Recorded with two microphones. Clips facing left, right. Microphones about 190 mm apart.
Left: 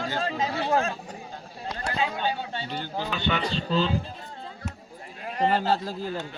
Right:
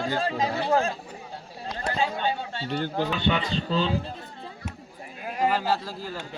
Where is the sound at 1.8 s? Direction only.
35° right (ahead or behind).